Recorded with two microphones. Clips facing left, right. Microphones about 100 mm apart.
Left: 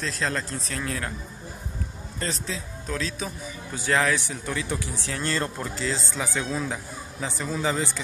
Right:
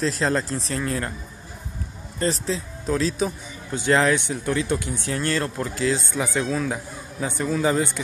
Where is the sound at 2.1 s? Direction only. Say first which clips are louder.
Right 7 dB; 35° right (ahead or behind).